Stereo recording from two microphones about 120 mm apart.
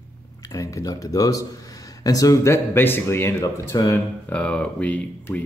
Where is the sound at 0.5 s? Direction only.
30° left (ahead or behind).